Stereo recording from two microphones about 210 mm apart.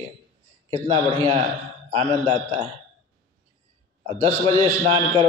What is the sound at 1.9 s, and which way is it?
Speech, 25° right (ahead or behind).